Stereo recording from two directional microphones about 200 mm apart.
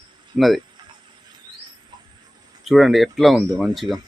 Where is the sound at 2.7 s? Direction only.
Centre (ahead or behind).